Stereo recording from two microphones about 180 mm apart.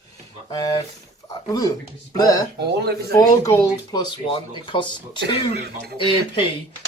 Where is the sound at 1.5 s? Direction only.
20° left (ahead or behind).